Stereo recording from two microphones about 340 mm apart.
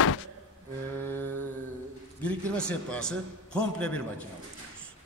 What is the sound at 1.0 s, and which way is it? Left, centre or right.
A man's voice, centre.